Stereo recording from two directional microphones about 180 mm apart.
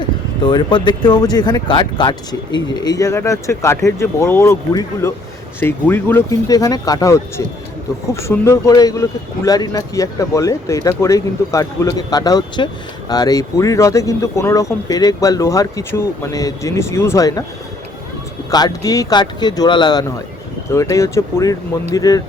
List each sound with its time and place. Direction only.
0.0 s speech: 25° left (ahead or behind)
18.5 s speech: 20° left (ahead or behind)